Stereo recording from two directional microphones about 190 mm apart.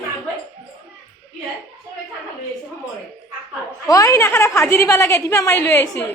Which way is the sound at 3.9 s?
20° left (ahead or behind).